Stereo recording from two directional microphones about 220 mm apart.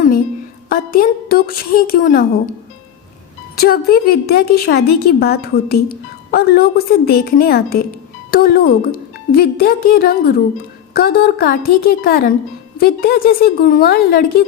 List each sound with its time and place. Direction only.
0.7 s a woman's voice: 40° left (ahead or behind)
3.6 s a woman's voice: 45° left (ahead or behind)